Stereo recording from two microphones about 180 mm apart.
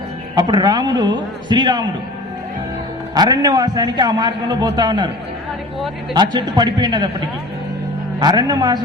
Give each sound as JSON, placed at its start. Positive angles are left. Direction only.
{"t": 0.3, "sound": "a man's voice", "side_deg": -25}
{"t": 3.2, "sound": "a man's voice", "side_deg": -20}
{"t": 6.1, "sound": "a man's voice", "side_deg": -25}
{"t": 8.2, "sound": "a man's voice", "side_deg": -25}